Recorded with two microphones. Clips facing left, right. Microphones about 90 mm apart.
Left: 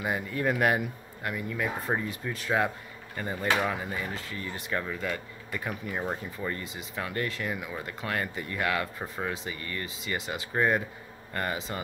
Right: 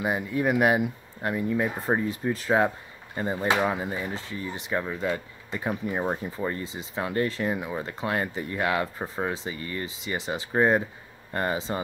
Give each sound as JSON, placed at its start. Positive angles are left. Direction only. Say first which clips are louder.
{"t": 0.0, "sound": "speech", "louder": "right 3 dB", "side_deg": -20}